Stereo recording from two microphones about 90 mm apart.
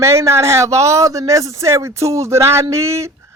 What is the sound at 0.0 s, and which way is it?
A man's voice, 30° right (ahead or behind).